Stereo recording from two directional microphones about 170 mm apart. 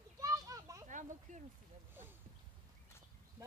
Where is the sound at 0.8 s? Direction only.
45° right (ahead or behind).